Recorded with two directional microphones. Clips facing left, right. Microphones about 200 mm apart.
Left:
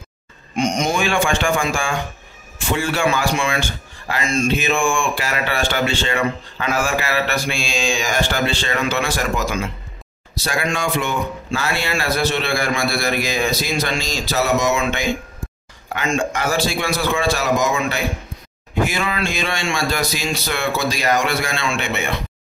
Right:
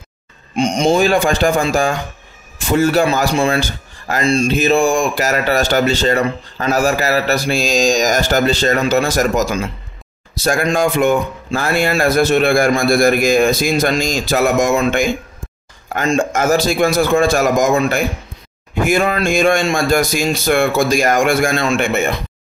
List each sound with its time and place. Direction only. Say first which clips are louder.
0.6 s speech: right 6 dB; 30° right (ahead or behind); by 22.1 s 45° right (ahead or behind)